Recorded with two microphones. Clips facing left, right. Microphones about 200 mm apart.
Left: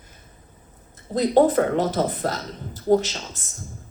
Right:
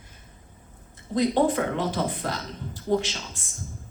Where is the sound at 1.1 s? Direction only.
40° left (ahead or behind).